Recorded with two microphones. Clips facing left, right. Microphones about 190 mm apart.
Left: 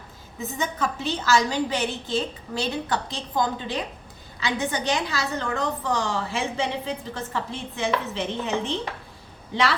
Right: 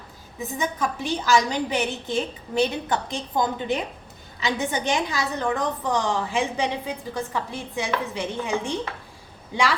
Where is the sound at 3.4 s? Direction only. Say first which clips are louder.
Right 1 dB; 20° right (ahead or behind).